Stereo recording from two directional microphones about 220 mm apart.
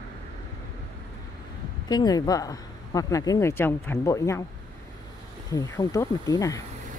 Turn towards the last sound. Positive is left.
turn(degrees=15)  # may be behind; listen again after turning